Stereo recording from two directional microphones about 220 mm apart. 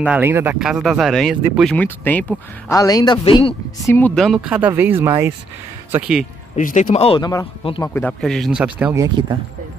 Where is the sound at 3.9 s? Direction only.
5° left (ahead or behind).